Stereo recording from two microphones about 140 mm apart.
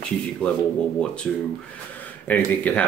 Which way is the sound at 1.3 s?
Centre (ahead or behind).